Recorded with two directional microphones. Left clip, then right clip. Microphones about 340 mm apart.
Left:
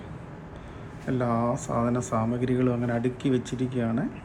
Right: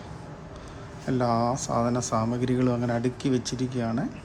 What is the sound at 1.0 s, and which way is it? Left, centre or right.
Speech, centre.